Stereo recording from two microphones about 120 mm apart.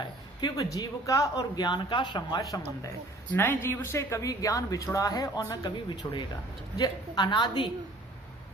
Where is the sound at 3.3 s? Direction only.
15° left (ahead or behind).